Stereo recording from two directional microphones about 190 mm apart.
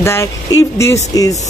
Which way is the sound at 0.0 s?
15° left (ahead or behind).